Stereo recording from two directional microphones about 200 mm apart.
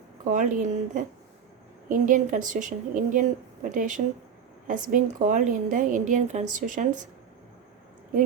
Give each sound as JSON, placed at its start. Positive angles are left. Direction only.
{"t": 0.3, "sound": "a woman's voice", "side_deg": -40}